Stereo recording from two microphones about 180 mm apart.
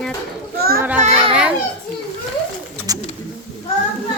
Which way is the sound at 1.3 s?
5° right (ahead or behind).